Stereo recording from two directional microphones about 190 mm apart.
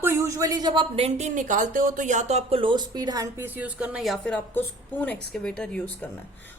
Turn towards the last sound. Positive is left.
turn(degrees=5)  # may be behind; listen again after turning